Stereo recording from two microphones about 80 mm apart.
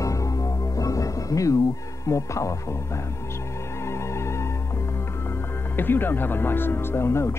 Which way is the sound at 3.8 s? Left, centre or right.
Left.